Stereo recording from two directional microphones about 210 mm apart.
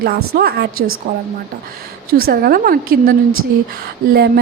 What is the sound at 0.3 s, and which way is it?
Speech, 50° right (ahead or behind).